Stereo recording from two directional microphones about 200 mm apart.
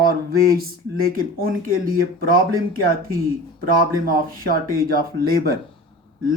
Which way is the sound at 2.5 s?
90° right.